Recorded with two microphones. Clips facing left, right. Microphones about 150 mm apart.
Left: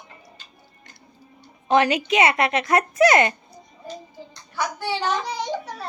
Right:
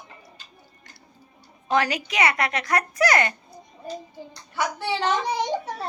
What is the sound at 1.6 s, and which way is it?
A woman's voice, 25° left (ahead or behind).